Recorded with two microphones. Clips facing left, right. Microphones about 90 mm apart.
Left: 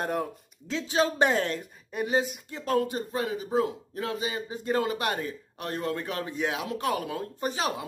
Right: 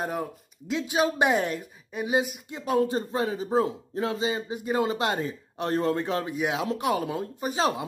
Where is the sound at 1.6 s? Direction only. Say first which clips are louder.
Left 1 dB; centre (ahead or behind).